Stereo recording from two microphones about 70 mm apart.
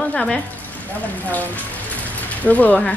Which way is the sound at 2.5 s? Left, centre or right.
Left.